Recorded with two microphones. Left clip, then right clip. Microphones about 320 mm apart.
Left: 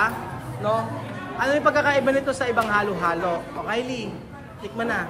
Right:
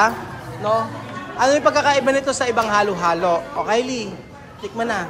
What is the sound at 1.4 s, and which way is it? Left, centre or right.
A man's voice, centre.